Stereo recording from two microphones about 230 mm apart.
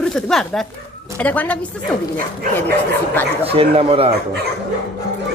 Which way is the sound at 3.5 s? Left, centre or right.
Right.